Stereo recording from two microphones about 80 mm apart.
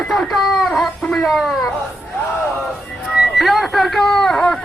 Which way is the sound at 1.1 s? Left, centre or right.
Centre.